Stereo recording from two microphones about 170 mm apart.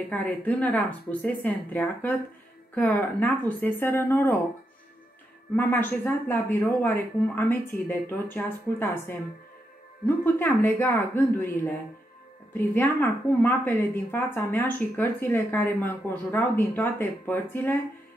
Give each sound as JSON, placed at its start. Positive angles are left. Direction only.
{"t": 0.1, "sound": "a woman's voice", "side_deg": 10}
{"t": 5.6, "sound": "a woman's voice", "side_deg": 10}